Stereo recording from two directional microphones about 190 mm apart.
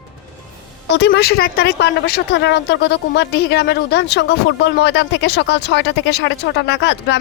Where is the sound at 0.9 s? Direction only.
65° left (ahead or behind).